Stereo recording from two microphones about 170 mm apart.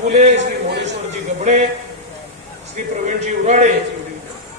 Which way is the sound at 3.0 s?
45° right (ahead or behind).